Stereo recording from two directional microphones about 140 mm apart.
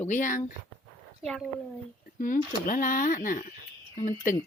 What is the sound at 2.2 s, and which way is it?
Speech, 70° left (ahead or behind).